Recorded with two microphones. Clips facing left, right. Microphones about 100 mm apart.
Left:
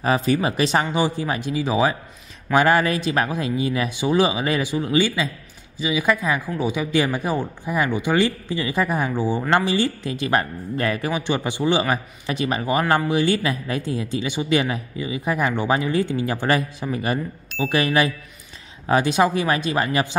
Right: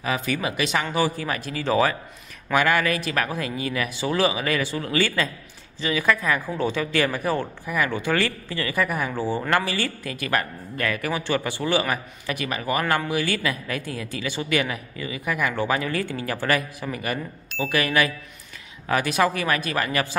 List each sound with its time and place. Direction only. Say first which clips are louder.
0.0 s speech: left 6 dB; 35° left (ahead or behind)
0.8 s speech: left 2 dB; 20° left (ahead or behind)
2.5 s speech: left 4 dB; 30° left (ahead or behind)
9.1 s speech: left 3 dB; 15° left (ahead or behind)